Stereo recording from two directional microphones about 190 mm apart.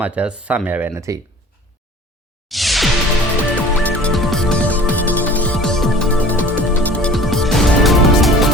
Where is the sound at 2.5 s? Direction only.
Centre (ahead or behind).